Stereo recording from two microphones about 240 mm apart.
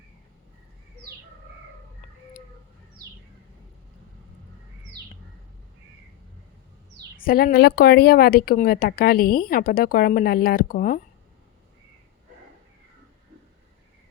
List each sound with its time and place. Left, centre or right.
7.2 s speech: left